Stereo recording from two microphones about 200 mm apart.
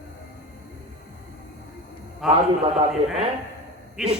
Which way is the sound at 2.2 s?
Centre (ahead or behind).